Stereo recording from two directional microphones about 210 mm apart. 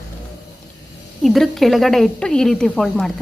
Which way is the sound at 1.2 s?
Centre (ahead or behind).